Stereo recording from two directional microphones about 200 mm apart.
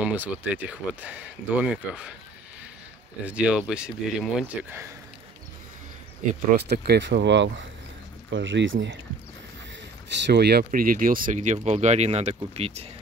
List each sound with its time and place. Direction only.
0.0 s speech: 10° right (ahead or behind)
3.3 s speech: 5° right (ahead or behind)
6.5 s speech: 55° right (ahead or behind)
10.0 s speech: 60° right (ahead or behind); by 12.8 s 30° right (ahead or behind)